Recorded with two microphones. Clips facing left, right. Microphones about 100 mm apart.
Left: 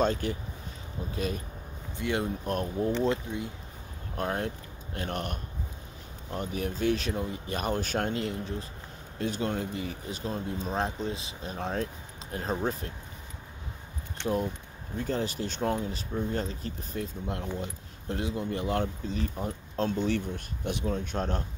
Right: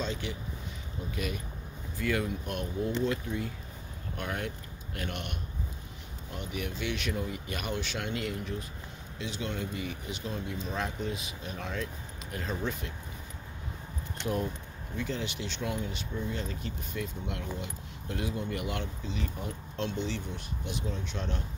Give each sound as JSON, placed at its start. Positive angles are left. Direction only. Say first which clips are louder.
{"t": 0.0, "sound": "speech", "louder": "left 8 dB", "side_deg": 45}
{"t": 1.1, "sound": "speech", "louder": "left 4 dB", "side_deg": 30}
{"t": 3.3, "sound": "speech", "louder": "even", "side_deg": 20}
{"t": 4.2, "sound": "speech", "louder": "left 5 dB", "side_deg": 35}
{"t": 8.1, "sound": "speech", "louder": "left 2 dB", "side_deg": 30}
{"t": 9.2, "sound": "speech", "louder": "left 5 dB", "side_deg": 45}
{"t": 14.2, "sound": "speech", "louder": "left 3 dB", "side_deg": 25}
{"t": 15.0, "sound": "speech", "louder": "left 4 dB", "side_deg": 40}